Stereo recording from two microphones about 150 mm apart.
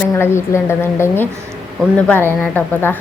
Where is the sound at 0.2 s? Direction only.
15° left (ahead or behind).